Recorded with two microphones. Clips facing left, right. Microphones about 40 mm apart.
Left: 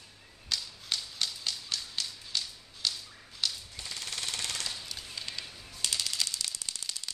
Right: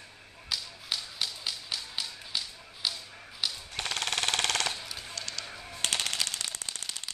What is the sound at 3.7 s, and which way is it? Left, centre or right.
Machine gun, right.